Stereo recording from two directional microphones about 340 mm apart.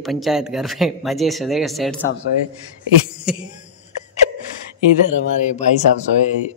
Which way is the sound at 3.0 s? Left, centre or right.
Centre.